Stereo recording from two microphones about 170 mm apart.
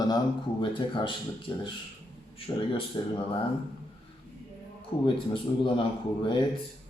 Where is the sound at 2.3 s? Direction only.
30° left (ahead or behind).